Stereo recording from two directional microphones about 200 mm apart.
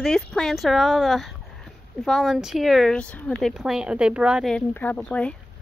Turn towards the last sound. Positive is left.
turn(degrees=5)  # may be behind; listen again after turning